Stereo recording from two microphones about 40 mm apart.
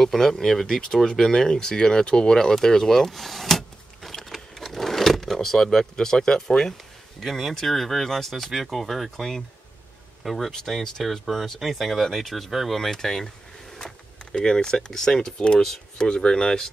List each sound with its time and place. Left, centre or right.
0.0 s speech: centre
4.1 s vehicle: centre
7.2 s speech: centre
10.7 s speech: centre
12.4 s speech: centre
12.7 s speech: centre